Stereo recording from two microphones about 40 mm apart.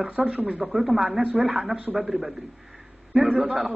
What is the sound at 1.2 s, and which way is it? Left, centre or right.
Speech, right.